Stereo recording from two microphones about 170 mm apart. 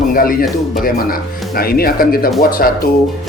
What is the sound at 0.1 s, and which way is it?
Speech, 55° left (ahead or behind).